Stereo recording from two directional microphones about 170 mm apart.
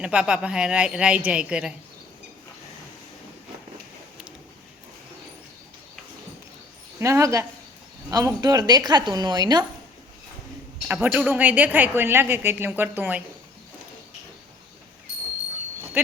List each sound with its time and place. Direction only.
0.0 s a woman's voice: 5° right (ahead or behind)
7.0 s a woman's voice: 15° right (ahead or behind)
10.8 s a woman's voice: 10° right (ahead or behind)